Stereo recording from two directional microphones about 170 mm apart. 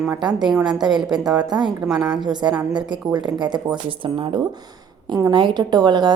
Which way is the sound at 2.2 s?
25° right (ahead or behind).